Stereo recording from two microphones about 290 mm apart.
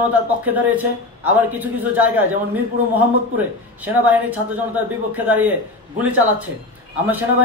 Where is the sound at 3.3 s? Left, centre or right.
Centre.